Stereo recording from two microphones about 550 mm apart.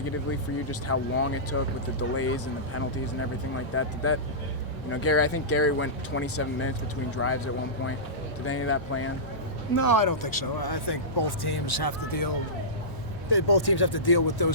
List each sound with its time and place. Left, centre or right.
0.7 s speech: left
8.4 s speech: left
9.7 s speech: left
13.3 s speech: left